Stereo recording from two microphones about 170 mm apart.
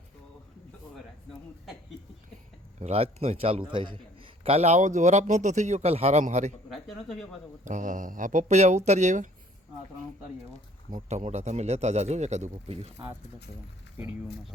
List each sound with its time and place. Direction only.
2.8 s a man's voice: 35° right (ahead or behind)
6.7 s speech: centre (ahead or behind)
7.6 s speech: 50° right (ahead or behind)
10.9 s a man's voice: 45° right (ahead or behind)
14.0 s speech: 10° right (ahead or behind)